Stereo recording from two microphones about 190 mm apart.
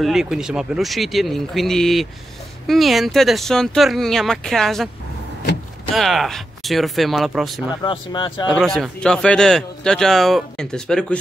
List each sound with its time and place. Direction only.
0.0 s a man's voice: 5° right (ahead or behind)
5.9 s a man's voice: centre (ahead or behind)
7.8 s speech: 25° left (ahead or behind)
8.5 s a man's voice: centre (ahead or behind)